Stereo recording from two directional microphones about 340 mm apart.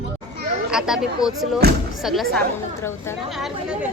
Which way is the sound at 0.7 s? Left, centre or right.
Centre.